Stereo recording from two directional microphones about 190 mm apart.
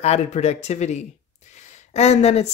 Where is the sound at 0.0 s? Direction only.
35° left (ahead or behind).